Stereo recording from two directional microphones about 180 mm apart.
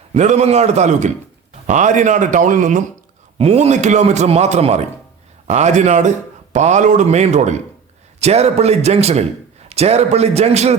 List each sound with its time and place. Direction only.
0.1 s a man's voice: 40° right (ahead or behind)
3.3 s a man's voice: 35° right (ahead or behind)